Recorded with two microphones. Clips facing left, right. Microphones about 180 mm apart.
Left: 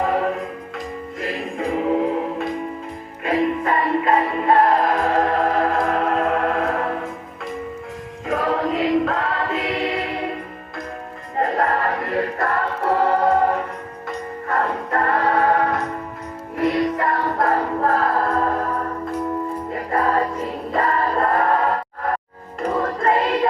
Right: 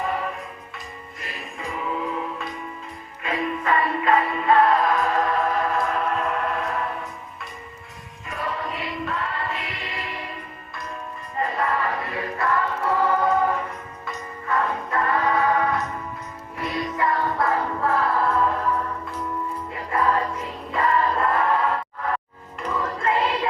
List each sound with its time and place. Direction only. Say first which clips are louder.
0.0 s music: left 7 dB; 55° left (ahead or behind)
1.2 s music: left 10 dB; 75° left (ahead or behind); by 2.5 s 55° left (ahead or behind)
3.2 s music: left 5 dB; 40° left (ahead or behind)
4.9 s music: left 4 dB; 55° left (ahead or behind)
8.3 s choir: left 9 dB; 90° left; by 10.3 s 65° left (ahead or behind)
11.3 s music: left 5 dB; 55° left (ahead or behind)
12.1 s choir: left 3 dB; 45° left (ahead or behind)
14.1 s music: left 3 dB; 50° left (ahead or behind)